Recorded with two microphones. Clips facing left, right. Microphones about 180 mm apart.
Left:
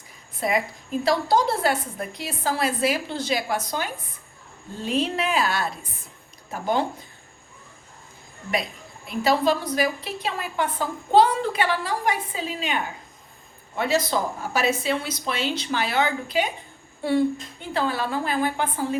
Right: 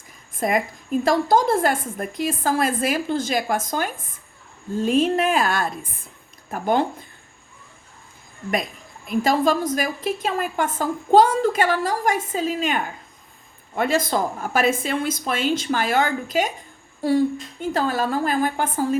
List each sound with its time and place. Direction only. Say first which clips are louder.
0.3 s a woman's voice: right 2 dB; 50° right (ahead or behind)
9.0 s a woman's voice: right 2 dB; 45° right (ahead or behind)